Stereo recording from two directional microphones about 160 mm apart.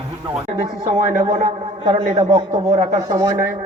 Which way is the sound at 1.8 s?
30° right (ahead or behind).